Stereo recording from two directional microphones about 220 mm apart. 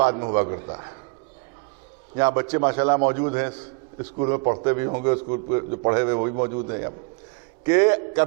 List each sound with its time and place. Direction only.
0.0 s a man's voice: 25° right (ahead or behind)
2.1 s a man's voice: 20° right (ahead or behind)